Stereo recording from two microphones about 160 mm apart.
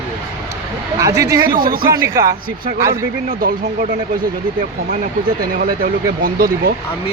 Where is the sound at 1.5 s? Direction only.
65° right (ahead or behind).